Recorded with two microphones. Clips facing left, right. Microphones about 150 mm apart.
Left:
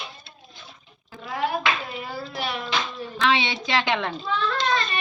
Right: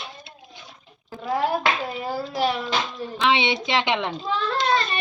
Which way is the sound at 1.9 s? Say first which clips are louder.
Right 5 dB; 40° right (ahead or behind).